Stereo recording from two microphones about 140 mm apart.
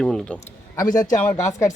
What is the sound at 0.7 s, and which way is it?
A man's voice, 30° left (ahead or behind).